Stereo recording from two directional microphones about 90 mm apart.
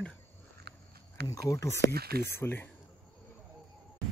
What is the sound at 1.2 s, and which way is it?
Speech, 35° left (ahead or behind).